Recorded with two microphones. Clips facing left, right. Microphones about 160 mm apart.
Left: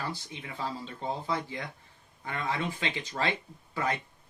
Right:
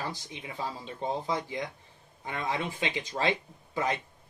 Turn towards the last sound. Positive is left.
turn(degrees=-15)  # may be behind; listen again after turning